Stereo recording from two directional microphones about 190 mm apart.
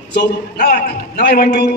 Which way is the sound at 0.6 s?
50° left (ahead or behind).